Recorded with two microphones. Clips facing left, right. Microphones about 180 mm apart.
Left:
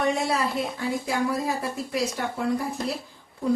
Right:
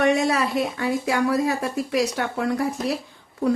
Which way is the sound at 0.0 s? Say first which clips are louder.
Right 5 dB; 75° right (ahead or behind).